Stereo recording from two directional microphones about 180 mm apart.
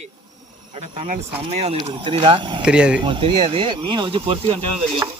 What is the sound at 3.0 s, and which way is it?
Speech, 25° right (ahead or behind).